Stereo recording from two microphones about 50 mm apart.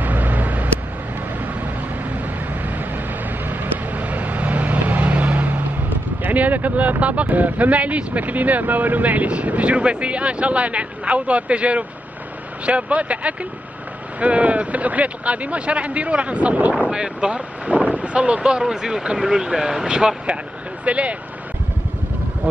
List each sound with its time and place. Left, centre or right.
0.0 s vehicle: right
2.0 s vehicle: right
12.6 s speech: right
16.9 s speech: centre